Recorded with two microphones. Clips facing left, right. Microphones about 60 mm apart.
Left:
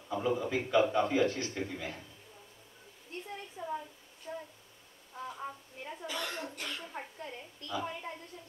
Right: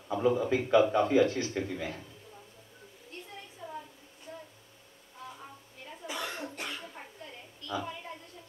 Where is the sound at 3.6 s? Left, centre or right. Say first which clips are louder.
Left 6 dB; left.